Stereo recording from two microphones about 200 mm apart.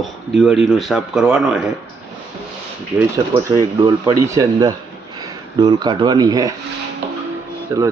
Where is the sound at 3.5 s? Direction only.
20° right (ahead or behind).